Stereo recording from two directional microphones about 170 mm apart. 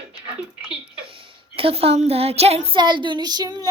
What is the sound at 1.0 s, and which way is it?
A woman's voice, 30° right (ahead or behind).